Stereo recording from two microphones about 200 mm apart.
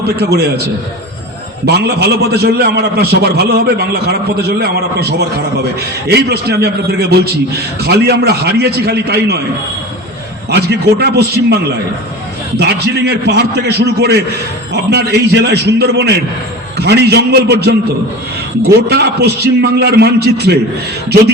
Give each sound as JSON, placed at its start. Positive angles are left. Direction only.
{"t": 0.2, "sound": "a man's voice", "side_deg": -55}
{"t": 1.6, "sound": "a man's voice", "side_deg": -55}
{"t": 10.5, "sound": "a man's voice", "side_deg": -55}